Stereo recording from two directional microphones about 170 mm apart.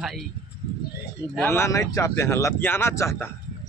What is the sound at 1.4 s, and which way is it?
Speech, 15° left (ahead or behind).